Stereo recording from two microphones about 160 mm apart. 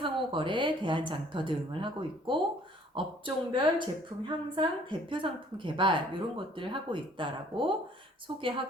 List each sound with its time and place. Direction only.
0.0 s a woman's voice: 30° right (ahead or behind)